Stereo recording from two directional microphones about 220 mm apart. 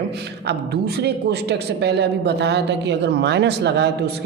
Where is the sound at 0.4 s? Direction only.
50° right (ahead or behind).